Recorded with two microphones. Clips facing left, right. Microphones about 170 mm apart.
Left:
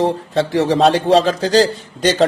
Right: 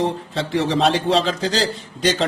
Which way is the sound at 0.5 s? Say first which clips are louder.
Left 4 dB; 50° left (ahead or behind).